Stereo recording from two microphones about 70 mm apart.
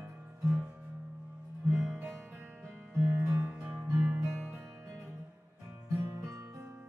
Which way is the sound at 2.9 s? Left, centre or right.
Right.